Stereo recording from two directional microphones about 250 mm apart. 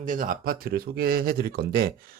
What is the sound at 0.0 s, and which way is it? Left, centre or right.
Speech, right.